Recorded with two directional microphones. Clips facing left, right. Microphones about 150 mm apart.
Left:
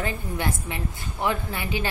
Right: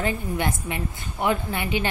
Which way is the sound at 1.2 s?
15° right (ahead or behind).